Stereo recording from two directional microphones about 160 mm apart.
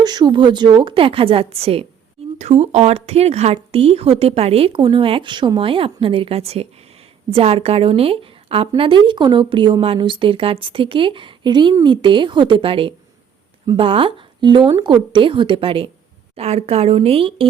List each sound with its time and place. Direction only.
0.0 s a woman's voice: 25° right (ahead or behind)